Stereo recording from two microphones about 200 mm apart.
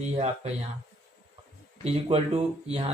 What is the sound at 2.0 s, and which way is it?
Speech, 30° right (ahead or behind).